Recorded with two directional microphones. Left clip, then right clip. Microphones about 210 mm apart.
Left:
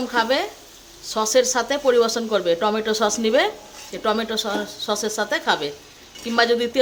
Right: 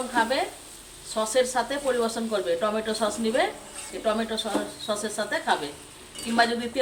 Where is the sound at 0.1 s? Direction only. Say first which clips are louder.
Left 4 dB; 50° left (ahead or behind).